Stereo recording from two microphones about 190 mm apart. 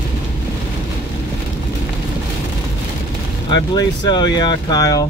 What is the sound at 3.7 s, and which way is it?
Speech, 25° left (ahead or behind).